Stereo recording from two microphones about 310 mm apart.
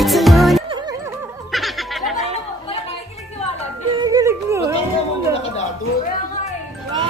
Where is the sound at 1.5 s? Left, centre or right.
Centre.